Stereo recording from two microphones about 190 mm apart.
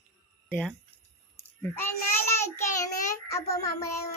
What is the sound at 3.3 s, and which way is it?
Child singing, 15° left (ahead or behind).